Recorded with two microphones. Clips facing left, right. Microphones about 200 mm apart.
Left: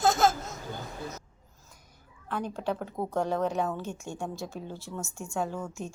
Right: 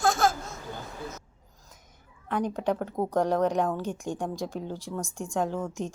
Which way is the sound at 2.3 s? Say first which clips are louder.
Right 4 dB; 15° right (ahead or behind).